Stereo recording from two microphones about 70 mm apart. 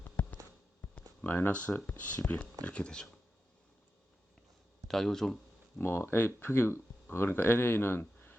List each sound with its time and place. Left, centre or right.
0.0 s a sound: left
1.5 s speech: left
4.9 s speech: centre
5.8 s speech: left